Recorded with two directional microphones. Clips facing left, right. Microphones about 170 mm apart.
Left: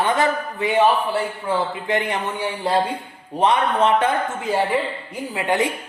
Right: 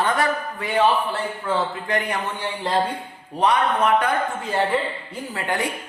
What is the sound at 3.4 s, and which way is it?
Speech, 25° left (ahead or behind).